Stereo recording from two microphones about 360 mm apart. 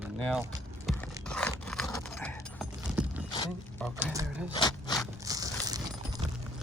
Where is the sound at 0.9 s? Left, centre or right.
Centre.